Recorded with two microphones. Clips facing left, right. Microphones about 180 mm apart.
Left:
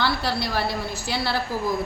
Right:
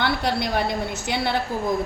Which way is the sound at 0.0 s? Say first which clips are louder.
Right 2 dB; 20° right (ahead or behind).